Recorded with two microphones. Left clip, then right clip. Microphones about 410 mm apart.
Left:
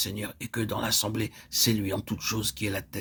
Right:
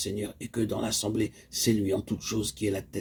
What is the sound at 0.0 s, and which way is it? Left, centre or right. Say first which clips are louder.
Speech: even; left.